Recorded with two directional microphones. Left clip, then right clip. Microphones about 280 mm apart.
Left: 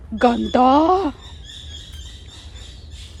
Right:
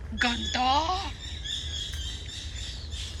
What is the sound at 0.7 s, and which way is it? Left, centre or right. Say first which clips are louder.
Speech: left 9 dB; left.